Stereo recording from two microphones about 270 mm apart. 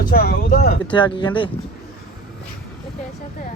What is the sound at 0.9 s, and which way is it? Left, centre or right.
Speech, centre.